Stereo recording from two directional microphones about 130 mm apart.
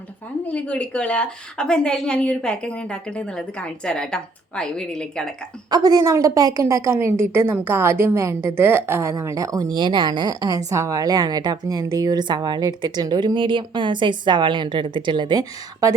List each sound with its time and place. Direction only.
0.4 s a woman's voice: 10° left (ahead or behind)
5.7 s a woman's voice: 30° right (ahead or behind)